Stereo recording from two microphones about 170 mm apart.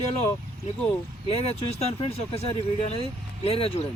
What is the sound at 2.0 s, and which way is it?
Speech, 35° left (ahead or behind).